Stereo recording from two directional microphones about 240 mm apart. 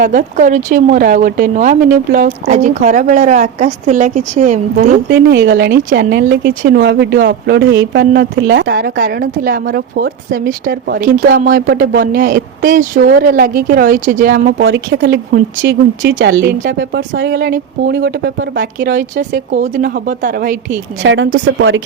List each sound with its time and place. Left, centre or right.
0.0 s speech: right
5.3 s speech: right
14.6 s speech: right
21.0 s speech: right